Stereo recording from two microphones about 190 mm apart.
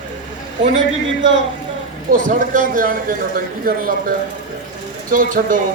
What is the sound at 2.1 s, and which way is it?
Speech, 45° right (ahead or behind).